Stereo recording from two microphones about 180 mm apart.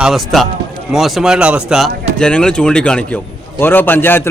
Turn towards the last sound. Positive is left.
turn(degrees=10)  # may be behind; listen again after turning